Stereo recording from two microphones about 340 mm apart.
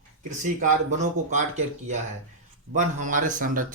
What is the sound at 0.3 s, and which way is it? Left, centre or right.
A man's voice, right.